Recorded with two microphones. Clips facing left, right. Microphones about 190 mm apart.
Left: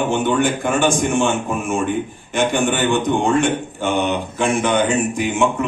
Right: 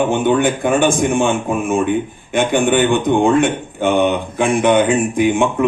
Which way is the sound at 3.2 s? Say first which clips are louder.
Right 3 dB; 55° right (ahead or behind).